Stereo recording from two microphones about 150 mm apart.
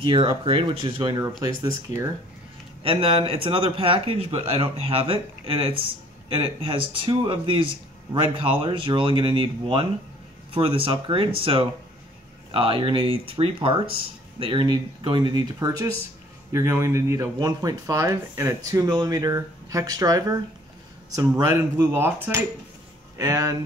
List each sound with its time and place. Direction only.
0.0 s speech: 35° right (ahead or behind)
2.8 s speech: 40° right (ahead or behind); by 23.6 s 25° right (ahead or behind)